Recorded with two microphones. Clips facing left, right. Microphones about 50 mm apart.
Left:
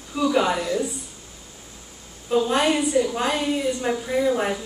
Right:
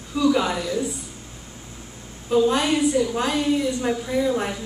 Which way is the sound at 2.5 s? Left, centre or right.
Centre.